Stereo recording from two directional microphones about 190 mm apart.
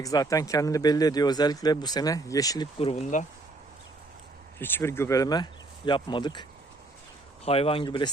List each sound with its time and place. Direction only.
0.0 s speech: 20° left (ahead or behind)
2.7 s speech: 35° left (ahead or behind)
4.6 s speech: 10° left (ahead or behind)
7.4 s speech: 30° left (ahead or behind)